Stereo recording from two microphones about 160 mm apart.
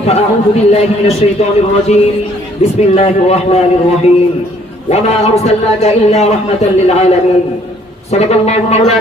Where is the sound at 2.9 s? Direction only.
40° left (ahead or behind).